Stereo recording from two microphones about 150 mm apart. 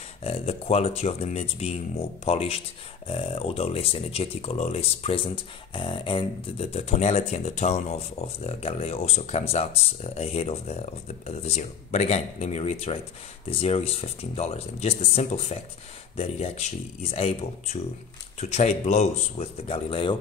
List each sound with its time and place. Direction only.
0.2 s speech: 40° left (ahead or behind)